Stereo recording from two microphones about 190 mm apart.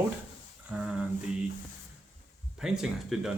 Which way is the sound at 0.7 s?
5° right (ahead or behind).